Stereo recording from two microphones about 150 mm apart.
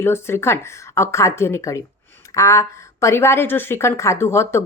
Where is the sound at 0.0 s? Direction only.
15° left (ahead or behind).